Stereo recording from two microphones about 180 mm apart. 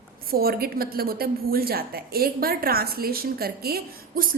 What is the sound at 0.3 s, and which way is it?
A woman's voice, 55° right (ahead or behind).